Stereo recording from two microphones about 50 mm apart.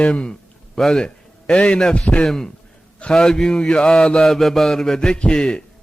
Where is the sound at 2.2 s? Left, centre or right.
Centre.